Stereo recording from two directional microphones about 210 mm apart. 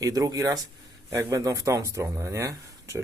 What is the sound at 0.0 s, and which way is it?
Speech, 15° right (ahead or behind).